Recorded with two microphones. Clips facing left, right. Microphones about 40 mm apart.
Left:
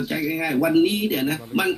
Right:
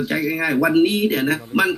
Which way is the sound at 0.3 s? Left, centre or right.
Right.